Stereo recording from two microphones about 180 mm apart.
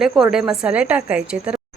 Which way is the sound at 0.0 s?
5° right (ahead or behind).